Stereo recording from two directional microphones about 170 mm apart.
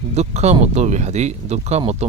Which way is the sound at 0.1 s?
40° right (ahead or behind).